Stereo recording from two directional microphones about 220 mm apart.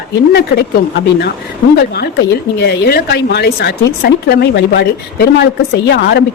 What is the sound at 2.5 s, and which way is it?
Speech, 50° left (ahead or behind).